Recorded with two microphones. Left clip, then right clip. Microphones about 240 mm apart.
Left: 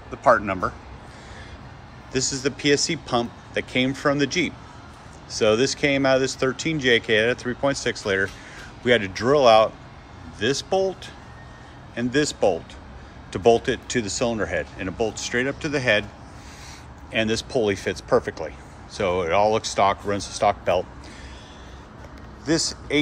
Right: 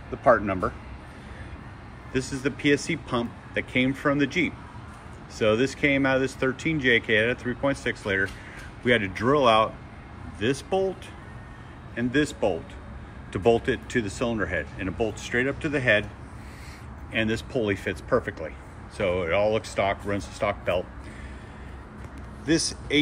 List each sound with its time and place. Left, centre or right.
0.2 s speech: centre
2.1 s speech: centre
11.9 s speech: centre
17.1 s speech: centre